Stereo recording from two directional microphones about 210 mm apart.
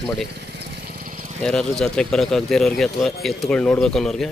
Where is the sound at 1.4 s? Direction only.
Centre (ahead or behind).